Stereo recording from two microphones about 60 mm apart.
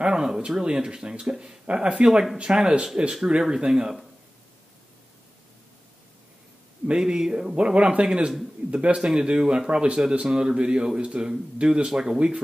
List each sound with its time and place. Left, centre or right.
0.0 s speech: centre
2.0 s speech: centre
6.9 s speech: centre